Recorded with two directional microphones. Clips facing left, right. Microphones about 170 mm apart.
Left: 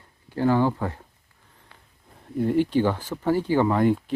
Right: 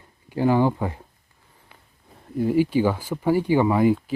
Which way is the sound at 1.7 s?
15° right (ahead or behind).